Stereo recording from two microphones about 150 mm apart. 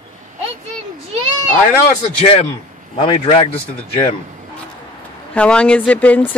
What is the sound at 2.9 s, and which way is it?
Speech, 40° left (ahead or behind).